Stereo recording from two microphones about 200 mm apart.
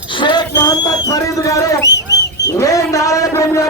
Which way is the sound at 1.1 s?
15° left (ahead or behind).